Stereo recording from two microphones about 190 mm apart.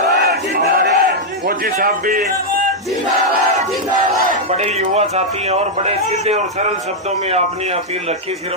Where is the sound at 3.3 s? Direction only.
45° right (ahead or behind).